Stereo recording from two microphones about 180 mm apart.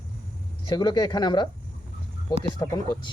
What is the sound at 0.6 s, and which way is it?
Speech, 25° left (ahead or behind).